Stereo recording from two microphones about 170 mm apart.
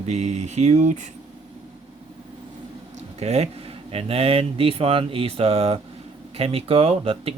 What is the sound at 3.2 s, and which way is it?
Speech, 40° right (ahead or behind).